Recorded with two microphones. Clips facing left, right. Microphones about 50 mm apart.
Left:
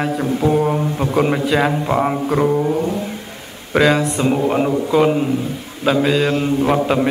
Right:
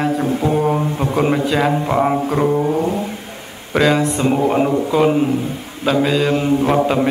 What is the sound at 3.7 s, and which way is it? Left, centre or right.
Mantra, centre.